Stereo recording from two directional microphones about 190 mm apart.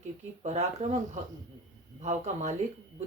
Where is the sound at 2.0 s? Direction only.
35° right (ahead or behind).